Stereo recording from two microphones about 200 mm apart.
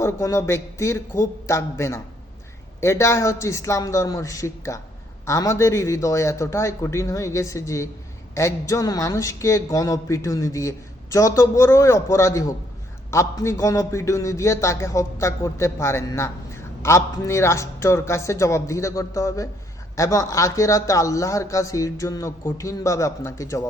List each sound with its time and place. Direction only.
0.0 s speech: 15° left (ahead or behind)